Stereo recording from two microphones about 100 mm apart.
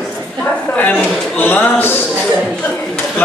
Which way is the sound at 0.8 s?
15° left (ahead or behind).